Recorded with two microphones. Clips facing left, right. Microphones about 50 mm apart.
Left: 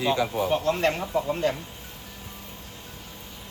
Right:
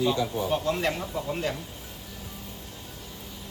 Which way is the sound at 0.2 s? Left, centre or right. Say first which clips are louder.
Left 3 dB; left.